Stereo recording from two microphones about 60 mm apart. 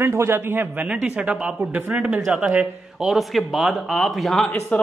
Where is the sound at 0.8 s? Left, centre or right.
Right.